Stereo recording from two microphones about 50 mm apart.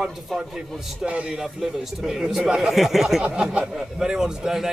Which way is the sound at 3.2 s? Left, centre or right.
Right.